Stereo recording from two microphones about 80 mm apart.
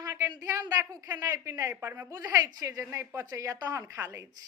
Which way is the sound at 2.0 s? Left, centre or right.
Right.